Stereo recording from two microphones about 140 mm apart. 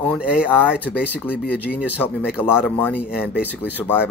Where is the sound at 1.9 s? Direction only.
15° left (ahead or behind).